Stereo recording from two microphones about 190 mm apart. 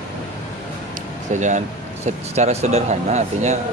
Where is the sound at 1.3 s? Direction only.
40° right (ahead or behind).